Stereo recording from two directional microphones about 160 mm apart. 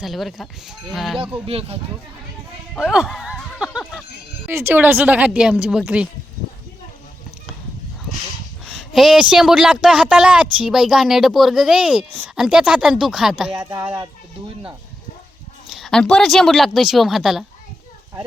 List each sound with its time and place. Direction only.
0.0 s a woman's voice: centre (ahead or behind)
1.5 s speech: 40° right (ahead or behind)
2.7 s a sound: 5° right (ahead or behind)
4.4 s speech: 15° right (ahead or behind)
8.6 s a sound: centre (ahead or behind)
9.3 s a woman's voice: 5° right (ahead or behind)
13.5 s speech: 25° right (ahead or behind)
15.7 s a woman's voice: centre (ahead or behind)